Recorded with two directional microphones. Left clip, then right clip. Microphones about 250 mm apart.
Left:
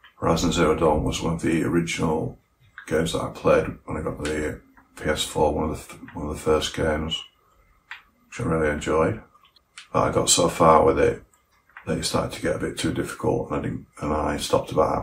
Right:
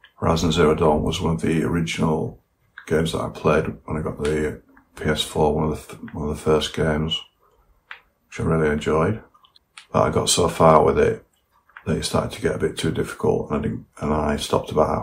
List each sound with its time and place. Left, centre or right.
0.2 s speech: right
4.9 s speech: right
8.3 s speech: right